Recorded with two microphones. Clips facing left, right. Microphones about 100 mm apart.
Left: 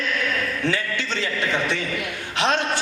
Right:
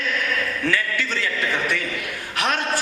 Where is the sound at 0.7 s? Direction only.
20° left (ahead or behind).